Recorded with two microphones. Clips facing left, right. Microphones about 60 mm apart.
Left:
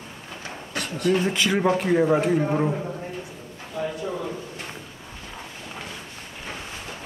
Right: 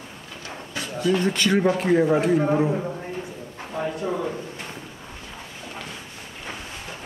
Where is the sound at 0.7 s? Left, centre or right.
Left.